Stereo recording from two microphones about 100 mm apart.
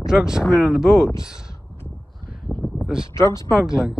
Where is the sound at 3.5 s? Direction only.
5° right (ahead or behind).